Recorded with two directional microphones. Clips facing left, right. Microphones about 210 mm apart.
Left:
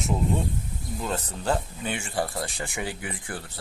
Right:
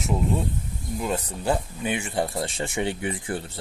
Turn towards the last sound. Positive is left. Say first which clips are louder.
# right 6 dB
turn(degrees=-25)  # may be behind; listen again after turning